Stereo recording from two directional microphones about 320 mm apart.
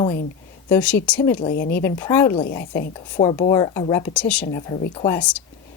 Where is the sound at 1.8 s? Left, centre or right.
Centre.